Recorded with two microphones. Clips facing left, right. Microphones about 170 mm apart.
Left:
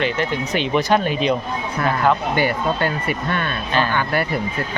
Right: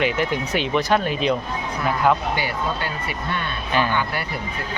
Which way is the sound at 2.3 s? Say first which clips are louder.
Left 5 dB; 55° left (ahead or behind).